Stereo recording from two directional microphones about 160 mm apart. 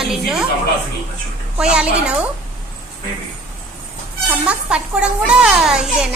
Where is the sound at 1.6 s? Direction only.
5° right (ahead or behind).